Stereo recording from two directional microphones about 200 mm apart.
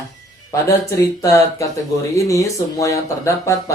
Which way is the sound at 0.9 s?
15° left (ahead or behind).